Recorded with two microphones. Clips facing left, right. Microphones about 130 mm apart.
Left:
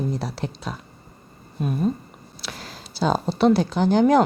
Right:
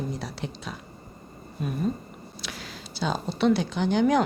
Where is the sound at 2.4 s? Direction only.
40° left (ahead or behind).